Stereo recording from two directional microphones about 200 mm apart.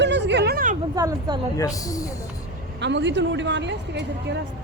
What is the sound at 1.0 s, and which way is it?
Speech, 20° right (ahead or behind).